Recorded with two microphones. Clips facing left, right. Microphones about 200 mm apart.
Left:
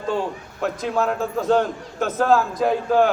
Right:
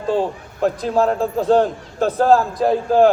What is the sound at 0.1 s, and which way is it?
A man's voice, 35° right (ahead or behind).